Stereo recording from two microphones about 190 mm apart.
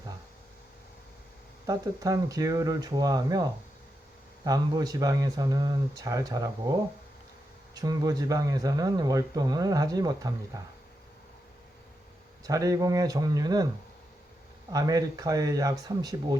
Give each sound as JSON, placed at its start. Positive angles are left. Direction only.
{"t": 1.6, "sound": "speech", "side_deg": -20}
{"t": 7.8, "sound": "speech", "side_deg": -20}
{"t": 12.5, "sound": "speech", "side_deg": -15}
{"t": 14.7, "sound": "speech", "side_deg": -20}